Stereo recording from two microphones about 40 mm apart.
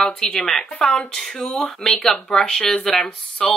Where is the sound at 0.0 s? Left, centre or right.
Centre.